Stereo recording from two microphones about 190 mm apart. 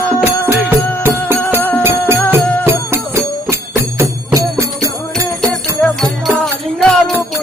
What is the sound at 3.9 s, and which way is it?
Jingle bell, 15° right (ahead or behind).